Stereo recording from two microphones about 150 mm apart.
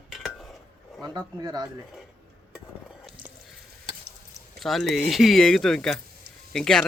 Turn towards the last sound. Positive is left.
turn(degrees=5)  # may be behind; listen again after turning